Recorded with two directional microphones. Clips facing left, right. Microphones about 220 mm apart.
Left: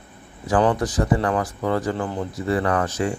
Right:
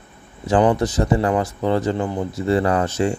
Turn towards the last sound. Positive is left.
turn(degrees=-25)  # may be behind; listen again after turning